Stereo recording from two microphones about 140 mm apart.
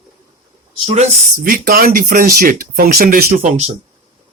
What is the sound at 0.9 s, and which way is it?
Speech, 50° right (ahead or behind).